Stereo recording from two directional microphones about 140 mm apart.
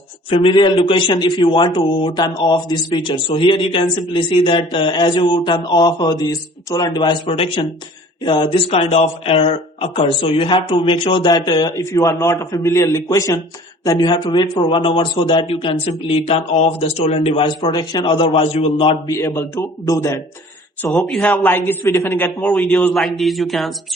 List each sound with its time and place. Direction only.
0.3 s a man's voice: 35° left (ahead or behind)
19.0 s a man's voice: 20° left (ahead or behind)
20.9 s speech: 5° left (ahead or behind)
21.4 s a man's voice: 15° left (ahead or behind)